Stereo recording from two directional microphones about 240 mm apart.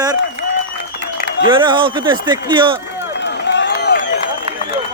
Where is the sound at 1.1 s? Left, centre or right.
Left.